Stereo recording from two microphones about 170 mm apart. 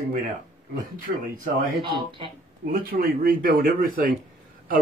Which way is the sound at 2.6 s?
60° right (ahead or behind).